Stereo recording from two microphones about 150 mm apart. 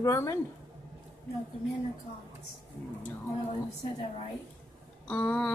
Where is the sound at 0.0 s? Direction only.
20° left (ahead or behind).